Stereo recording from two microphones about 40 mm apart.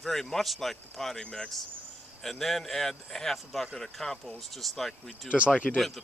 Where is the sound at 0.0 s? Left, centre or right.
Centre.